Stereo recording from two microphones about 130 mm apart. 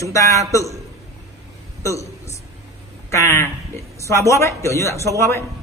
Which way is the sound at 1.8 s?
25° left (ahead or behind).